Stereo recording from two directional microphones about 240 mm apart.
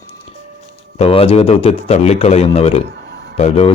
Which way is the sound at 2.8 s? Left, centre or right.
Right.